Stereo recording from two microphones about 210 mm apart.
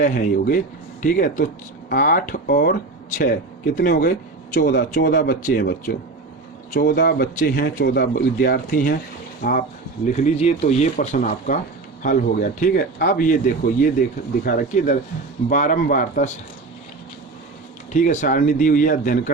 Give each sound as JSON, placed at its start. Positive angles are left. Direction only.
{"t": 0.0, "sound": "speech", "side_deg": 40}
{"t": 14.4, "sound": "speech", "side_deg": 45}
{"t": 17.9, "sound": "speech", "side_deg": 35}